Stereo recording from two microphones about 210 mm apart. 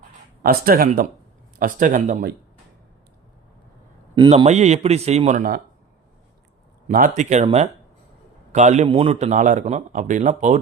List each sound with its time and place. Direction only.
0.4 s a man's voice: 45° right (ahead or behind)
4.1 s a man's voice: 25° right (ahead or behind); by 5.6 s 40° right (ahead or behind)
6.8 s a man's voice: 40° right (ahead or behind)